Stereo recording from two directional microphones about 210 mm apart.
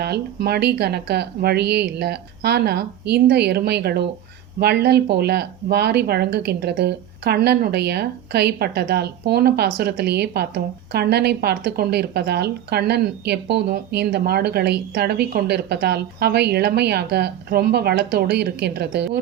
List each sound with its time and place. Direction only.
0.0 s speech: 50° right (ahead or behind)